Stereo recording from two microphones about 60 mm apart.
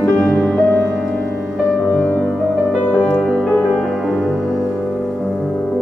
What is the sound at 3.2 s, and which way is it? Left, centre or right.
Music, centre.